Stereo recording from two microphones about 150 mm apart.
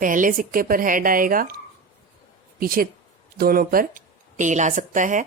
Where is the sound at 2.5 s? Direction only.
75° right (ahead or behind).